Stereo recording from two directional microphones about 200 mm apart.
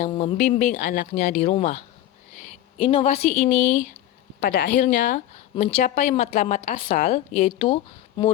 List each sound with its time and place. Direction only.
0.0 s a woman's voice: 35° left (ahead or behind)
4.4 s speech: 50° left (ahead or behind)
4.8 s a woman's voice: 40° left (ahead or behind)